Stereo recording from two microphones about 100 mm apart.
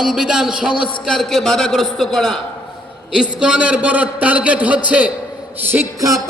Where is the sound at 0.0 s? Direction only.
5° right (ahead or behind).